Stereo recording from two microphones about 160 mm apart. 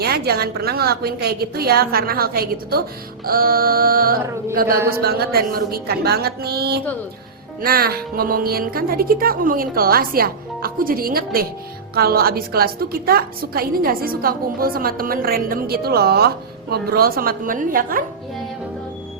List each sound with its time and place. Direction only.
0.0 s a woman's voice: 80° right
7.6 s a woman's voice: 70° right (ahead or behind)
16.9 s a woman's voice: 65° right (ahead or behind)